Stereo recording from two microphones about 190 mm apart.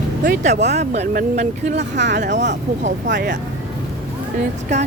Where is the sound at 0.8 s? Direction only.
60° right (ahead or behind).